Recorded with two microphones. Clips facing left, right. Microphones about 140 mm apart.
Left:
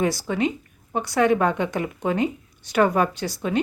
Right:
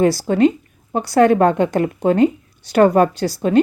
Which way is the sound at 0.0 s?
35° right (ahead or behind).